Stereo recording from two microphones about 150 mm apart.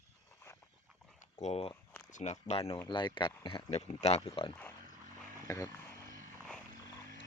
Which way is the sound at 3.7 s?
45° left (ahead or behind).